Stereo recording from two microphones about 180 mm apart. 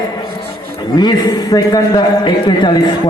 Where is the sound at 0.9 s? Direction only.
25° left (ahead or behind).